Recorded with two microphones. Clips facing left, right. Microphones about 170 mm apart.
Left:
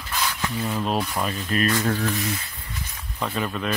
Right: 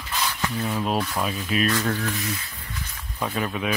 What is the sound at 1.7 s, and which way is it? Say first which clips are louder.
Speech: left 1 dB; 15° left (ahead or behind).